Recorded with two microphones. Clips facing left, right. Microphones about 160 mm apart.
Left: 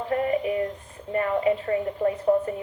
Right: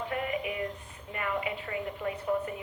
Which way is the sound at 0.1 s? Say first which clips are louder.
Left 12 dB; 35° left (ahead or behind).